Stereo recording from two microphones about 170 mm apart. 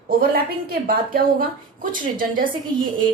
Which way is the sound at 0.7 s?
60° right (ahead or behind).